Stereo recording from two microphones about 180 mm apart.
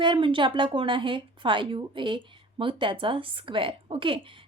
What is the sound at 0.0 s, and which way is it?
A woman's voice, 25° right (ahead or behind).